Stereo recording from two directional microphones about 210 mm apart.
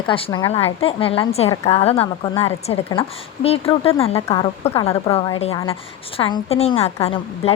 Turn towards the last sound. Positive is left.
turn(degrees=30)  # may be behind; listen again after turning